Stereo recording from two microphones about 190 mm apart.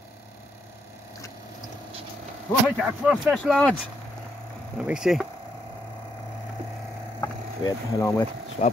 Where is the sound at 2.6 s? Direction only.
5° right (ahead or behind).